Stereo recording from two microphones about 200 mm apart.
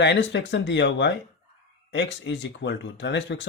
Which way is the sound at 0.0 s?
60° left (ahead or behind).